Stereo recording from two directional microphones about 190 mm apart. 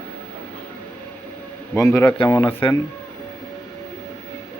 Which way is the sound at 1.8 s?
15° left (ahead or behind).